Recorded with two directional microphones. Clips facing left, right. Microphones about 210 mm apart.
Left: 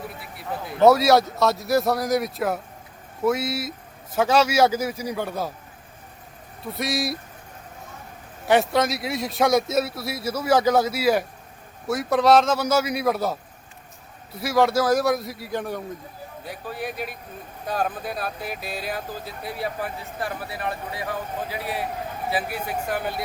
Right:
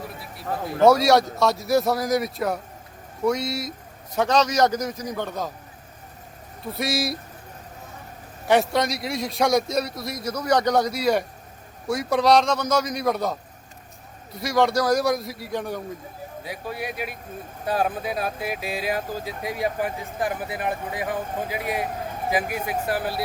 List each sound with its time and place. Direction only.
0.8 s a man's voice: centre (ahead or behind)
6.6 s a man's voice: centre (ahead or behind)
8.4 s a man's voice: centre (ahead or behind)
16.4 s speech: 10° right (ahead or behind)
22.3 s speech: 15° right (ahead or behind)